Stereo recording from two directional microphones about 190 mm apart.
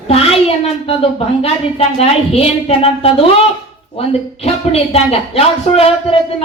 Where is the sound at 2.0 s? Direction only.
30° left (ahead or behind).